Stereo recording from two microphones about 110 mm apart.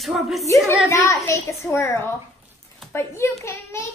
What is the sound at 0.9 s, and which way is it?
A child's voice, 25° left (ahead or behind).